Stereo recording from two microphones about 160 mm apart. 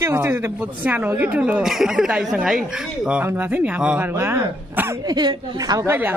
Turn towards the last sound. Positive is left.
turn(degrees=-20)  # may be behind; listen again after turning